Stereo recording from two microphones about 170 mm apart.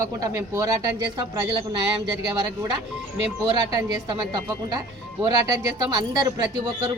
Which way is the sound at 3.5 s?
25° right (ahead or behind).